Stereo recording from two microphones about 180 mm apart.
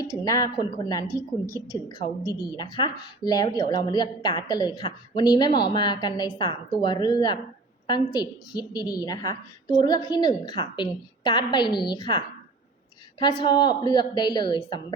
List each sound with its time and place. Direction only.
0.0 s a woman's voice: 20° left (ahead or behind)